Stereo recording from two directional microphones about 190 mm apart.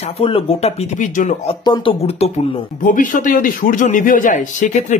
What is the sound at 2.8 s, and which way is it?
A man's voice, 45° left (ahead or behind).